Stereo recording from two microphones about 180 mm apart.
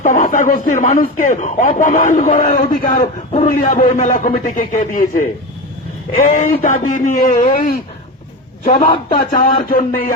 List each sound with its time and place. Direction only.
0.0 s speech: 45° left (ahead or behind)